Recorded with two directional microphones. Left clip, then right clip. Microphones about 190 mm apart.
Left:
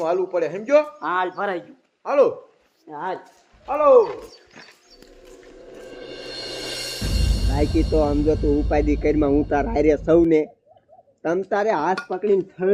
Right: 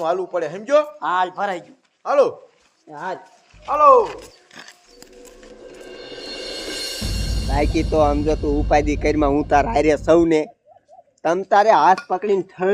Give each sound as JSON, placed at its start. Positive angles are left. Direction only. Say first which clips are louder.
{"t": 0.0, "sound": "a man's voice", "louder": "even", "side_deg": -10}
{"t": 0.9, "sound": "a man's voice", "louder": "right 3 dB", "side_deg": -20}
{"t": 3.7, "sound": "mechanisms", "louder": "right 4 dB", "side_deg": -35}
{"t": 4.0, "sound": "a sound", "louder": "left 1 dB", "side_deg": -60}
{"t": 7.5, "sound": "speech", "louder": "right 2 dB", "side_deg": -25}